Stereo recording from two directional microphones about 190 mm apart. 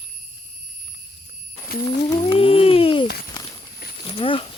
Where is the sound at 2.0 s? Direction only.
25° left (ahead or behind).